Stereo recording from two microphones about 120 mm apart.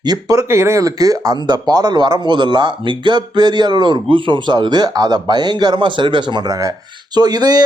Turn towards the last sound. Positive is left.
turn(degrees=-35)  # may be behind; listen again after turning